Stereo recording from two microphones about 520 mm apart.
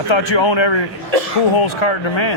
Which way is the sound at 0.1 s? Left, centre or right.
Left.